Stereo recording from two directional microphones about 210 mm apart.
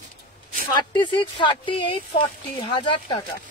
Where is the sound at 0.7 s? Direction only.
20° left (ahead or behind).